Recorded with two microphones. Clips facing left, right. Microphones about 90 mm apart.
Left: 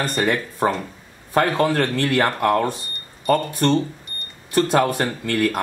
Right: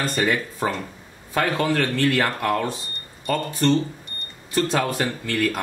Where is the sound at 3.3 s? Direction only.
55° left (ahead or behind).